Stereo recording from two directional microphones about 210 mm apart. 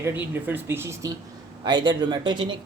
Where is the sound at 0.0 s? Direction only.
10° right (ahead or behind).